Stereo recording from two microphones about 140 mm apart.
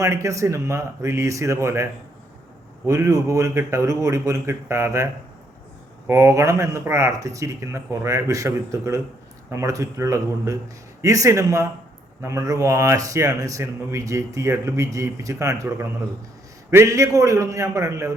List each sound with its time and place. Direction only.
0.0 s speech: 20° right (ahead or behind)
6.1 s speech: 20° right (ahead or behind)